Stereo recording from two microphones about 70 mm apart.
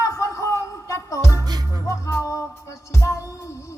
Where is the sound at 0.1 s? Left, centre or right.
Left.